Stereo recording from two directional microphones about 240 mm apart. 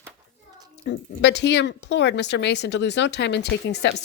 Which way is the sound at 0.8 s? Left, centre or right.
Left.